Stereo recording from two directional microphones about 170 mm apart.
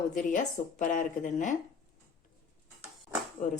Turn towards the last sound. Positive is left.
turn(degrees=50)  # may be behind; listen again after turning